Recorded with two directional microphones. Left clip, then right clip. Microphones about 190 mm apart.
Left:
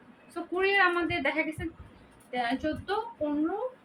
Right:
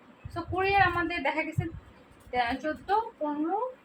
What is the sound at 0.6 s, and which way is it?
A woman's voice, 15° left (ahead or behind).